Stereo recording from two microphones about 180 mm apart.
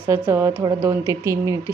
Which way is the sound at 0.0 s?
10° right (ahead or behind).